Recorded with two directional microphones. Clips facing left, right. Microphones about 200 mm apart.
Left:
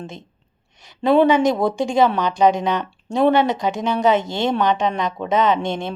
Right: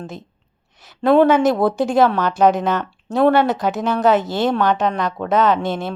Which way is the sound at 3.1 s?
15° left (ahead or behind).